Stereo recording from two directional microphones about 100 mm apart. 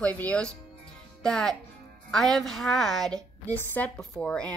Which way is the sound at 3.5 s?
15° left (ahead or behind).